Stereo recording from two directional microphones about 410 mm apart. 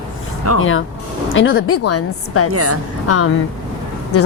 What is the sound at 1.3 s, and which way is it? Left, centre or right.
A woman's voice, left.